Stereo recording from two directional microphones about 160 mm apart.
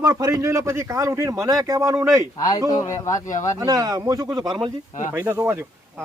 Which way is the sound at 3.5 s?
25° right (ahead or behind).